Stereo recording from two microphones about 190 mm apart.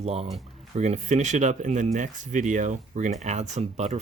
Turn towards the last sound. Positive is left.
turn(degrees=-35)  # may be behind; listen again after turning